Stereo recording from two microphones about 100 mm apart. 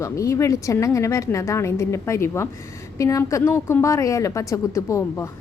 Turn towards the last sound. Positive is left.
turn(degrees=30)  # may be behind; listen again after turning